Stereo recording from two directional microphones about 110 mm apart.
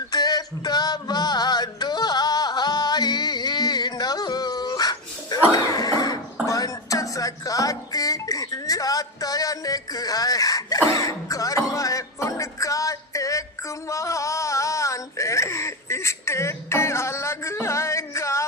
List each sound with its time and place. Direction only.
0.1 s male singing: 35° left (ahead or behind)
6.4 s music: 30° left (ahead or behind)